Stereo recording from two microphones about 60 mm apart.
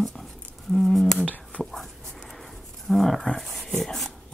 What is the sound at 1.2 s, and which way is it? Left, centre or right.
Whispering, left.